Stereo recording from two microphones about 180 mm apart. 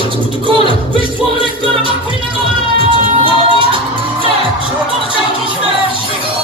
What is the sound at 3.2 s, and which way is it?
Music, 30° right (ahead or behind).